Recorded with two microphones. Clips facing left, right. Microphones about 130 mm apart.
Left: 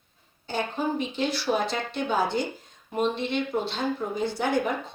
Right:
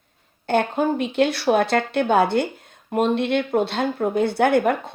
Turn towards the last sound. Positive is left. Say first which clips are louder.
# right 8 dB
turn(degrees=-60)  # may be behind; listen again after turning